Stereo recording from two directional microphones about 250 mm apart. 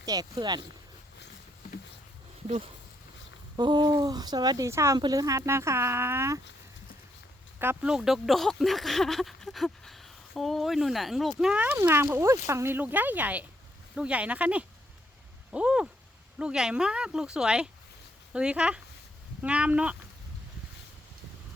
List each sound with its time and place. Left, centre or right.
0.0 s speech: centre
3.6 s speech: centre
7.6 s speech: centre